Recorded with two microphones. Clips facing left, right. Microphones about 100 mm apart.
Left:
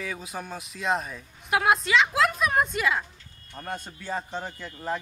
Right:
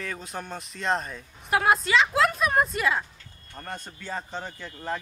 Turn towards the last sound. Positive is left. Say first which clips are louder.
# left 1 dB
turn(degrees=5)  # may be behind; listen again after turning